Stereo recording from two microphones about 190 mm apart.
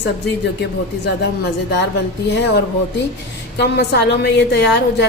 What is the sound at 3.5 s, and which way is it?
Speech, 60° left (ahead or behind).